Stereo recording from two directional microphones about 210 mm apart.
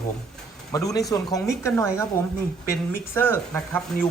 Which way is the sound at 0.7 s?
15° left (ahead or behind).